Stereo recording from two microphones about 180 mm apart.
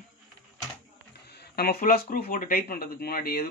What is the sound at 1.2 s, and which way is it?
Speech, 65° left (ahead or behind).